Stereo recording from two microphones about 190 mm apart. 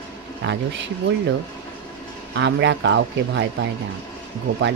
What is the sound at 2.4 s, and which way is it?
Speech, 65° right (ahead or behind).